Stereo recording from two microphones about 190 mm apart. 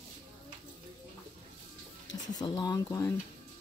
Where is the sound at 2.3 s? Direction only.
20° left (ahead or behind).